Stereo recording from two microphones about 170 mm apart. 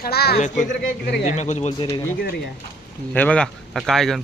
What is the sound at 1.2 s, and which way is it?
Speech, 45° left (ahead or behind).